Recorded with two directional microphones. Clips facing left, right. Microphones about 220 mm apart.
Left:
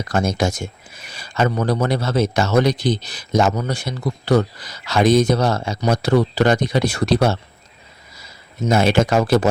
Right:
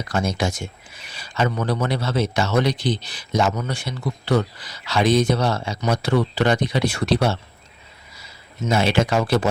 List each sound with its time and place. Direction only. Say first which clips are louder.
0.0 s speech: left 3 dB; 45° left (ahead or behind)